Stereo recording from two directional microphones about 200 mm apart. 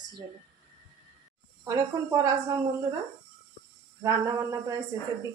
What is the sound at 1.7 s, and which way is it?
Speech, 15° right (ahead or behind).